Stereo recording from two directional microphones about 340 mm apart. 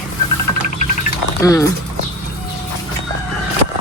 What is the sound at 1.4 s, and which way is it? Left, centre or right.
Speech, centre.